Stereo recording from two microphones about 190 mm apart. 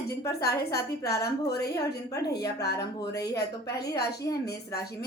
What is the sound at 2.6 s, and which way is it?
A woman's voice, 60° left (ahead or behind).